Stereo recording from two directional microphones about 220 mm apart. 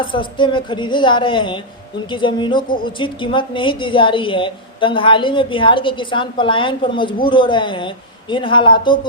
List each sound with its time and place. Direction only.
0.0 s a woman's voice: 20° left (ahead or behind)